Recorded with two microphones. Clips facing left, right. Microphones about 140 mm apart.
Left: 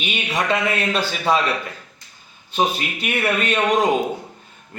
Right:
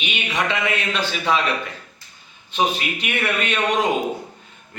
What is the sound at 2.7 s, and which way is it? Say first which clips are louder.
Speech: left 1 dB; 40° left (ahead or behind).